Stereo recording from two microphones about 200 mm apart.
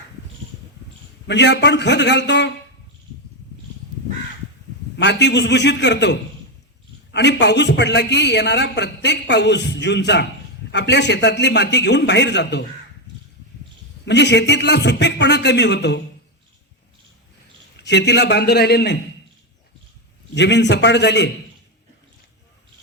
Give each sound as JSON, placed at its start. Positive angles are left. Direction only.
{"t": 1.3, "sound": "a man's voice", "side_deg": 60}
{"t": 4.9, "sound": "a man's voice", "side_deg": 60}
{"t": 14.0, "sound": "a man's voice", "side_deg": 60}
{"t": 17.7, "sound": "a man's voice", "side_deg": 60}
{"t": 20.3, "sound": "a man's voice", "side_deg": 60}